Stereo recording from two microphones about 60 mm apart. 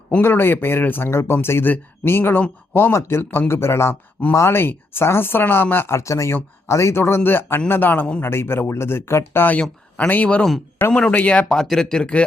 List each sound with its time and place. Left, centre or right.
0.2 s speech: left
9.5 s speech: centre
11.5 s speech: centre